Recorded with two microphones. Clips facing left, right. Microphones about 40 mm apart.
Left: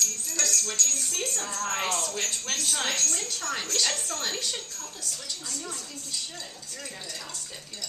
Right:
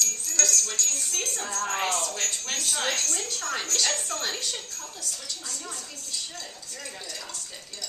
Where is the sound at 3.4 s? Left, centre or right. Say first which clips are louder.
Right 1 dB; centre.